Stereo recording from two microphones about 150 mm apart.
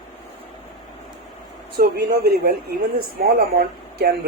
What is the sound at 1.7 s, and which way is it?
A woman's voice, 90° right.